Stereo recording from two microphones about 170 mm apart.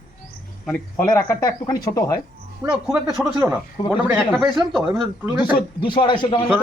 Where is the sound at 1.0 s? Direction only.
20° left (ahead or behind).